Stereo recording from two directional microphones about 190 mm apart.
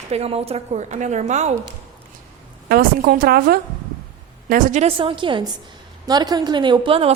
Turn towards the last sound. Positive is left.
turn(degrees=-30)  # may be behind; listen again after turning